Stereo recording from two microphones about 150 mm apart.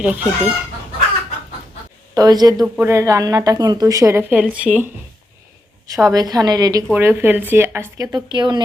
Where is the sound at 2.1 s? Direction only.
25° right (ahead or behind); by 4.9 s 10° right (ahead or behind).